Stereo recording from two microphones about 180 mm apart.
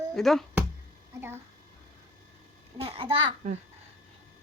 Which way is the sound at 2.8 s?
30° right (ahead or behind).